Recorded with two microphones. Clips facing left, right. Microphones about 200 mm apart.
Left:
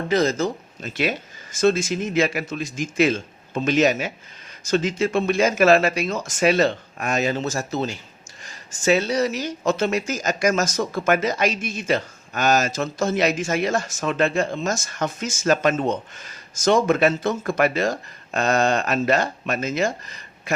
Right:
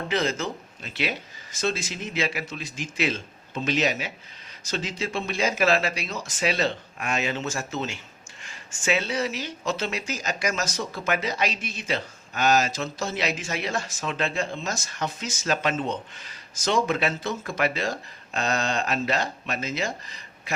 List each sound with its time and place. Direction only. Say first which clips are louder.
0.1 s speech: left 7 dB; 40° left (ahead or behind)